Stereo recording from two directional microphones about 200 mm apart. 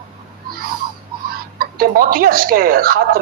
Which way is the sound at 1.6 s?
45° right (ahead or behind).